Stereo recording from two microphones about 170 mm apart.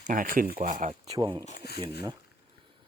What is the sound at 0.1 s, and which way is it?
Speech, 55° right (ahead or behind).